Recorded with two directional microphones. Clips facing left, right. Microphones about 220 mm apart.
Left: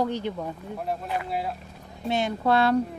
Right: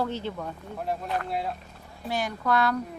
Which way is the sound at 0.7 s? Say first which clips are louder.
Right 1 dB; centre (ahead or behind).